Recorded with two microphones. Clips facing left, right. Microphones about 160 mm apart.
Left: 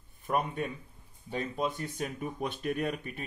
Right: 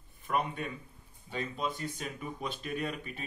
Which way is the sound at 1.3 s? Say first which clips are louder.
Left 3 dB; 50° left (ahead or behind).